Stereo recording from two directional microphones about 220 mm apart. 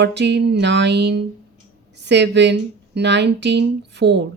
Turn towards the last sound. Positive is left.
turn(degrees=-50)  # may be behind; listen again after turning